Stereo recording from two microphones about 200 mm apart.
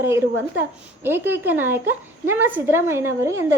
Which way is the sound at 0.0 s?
10° right (ahead or behind).